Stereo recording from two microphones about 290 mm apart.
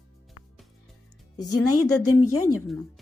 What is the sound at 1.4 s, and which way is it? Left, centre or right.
Speech, left.